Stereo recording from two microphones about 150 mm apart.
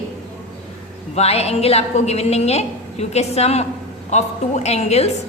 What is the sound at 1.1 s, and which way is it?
A woman's voice, 45° left (ahead or behind).